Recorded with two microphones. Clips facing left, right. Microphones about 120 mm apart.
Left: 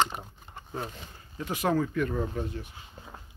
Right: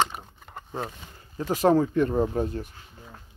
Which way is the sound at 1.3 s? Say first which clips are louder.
Right 7 dB; 35° right (ahead or behind).